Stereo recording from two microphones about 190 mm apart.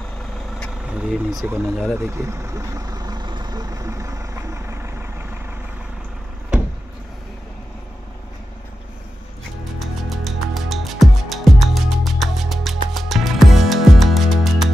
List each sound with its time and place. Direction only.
0.9 s speech: 5° right (ahead or behind)
2.0 s vehicle: 15° right (ahead or behind)
9.8 s music: centre (ahead or behind)